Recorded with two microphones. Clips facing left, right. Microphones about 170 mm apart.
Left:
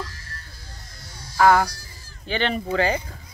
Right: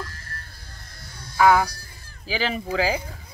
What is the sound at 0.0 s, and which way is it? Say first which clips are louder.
Music: left 1 dB; 55° right (ahead or behind).